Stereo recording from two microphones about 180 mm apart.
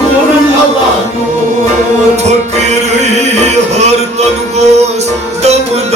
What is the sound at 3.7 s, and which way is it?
Music, 40° right (ahead or behind).